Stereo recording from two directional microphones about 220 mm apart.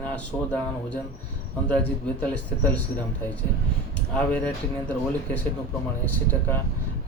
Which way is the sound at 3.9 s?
5° left (ahead or behind).